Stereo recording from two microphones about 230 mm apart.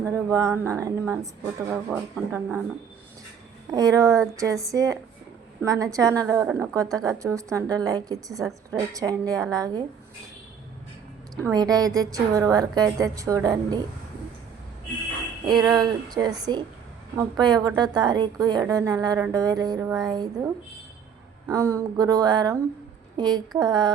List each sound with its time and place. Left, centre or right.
0.0 s a woman's voice: centre
3.7 s a woman's voice: centre
11.4 s a woman's voice: centre
15.6 s a woman's voice: centre